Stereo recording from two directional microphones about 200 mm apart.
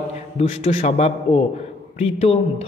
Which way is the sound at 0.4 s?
30° left (ahead or behind).